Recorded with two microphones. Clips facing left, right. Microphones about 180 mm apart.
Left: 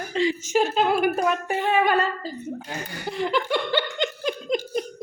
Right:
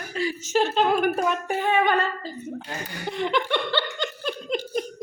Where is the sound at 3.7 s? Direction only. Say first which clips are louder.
Left 3 dB; 15° left (ahead or behind).